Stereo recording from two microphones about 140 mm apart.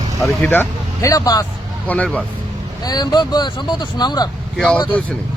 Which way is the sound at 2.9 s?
30° left (ahead or behind).